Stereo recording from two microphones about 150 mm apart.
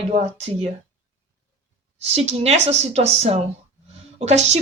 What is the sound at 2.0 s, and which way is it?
Speech, 45° right (ahead or behind).